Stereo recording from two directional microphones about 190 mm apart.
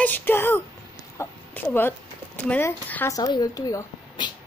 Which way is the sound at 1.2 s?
10° left (ahead or behind).